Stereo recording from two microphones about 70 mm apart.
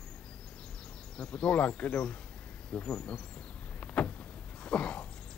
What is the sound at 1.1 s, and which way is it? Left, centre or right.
Speech, centre.